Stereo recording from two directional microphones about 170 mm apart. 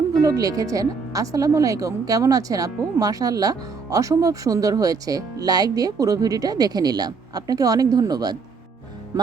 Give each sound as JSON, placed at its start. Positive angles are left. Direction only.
{"t": 0.1, "sound": "speech", "side_deg": -20}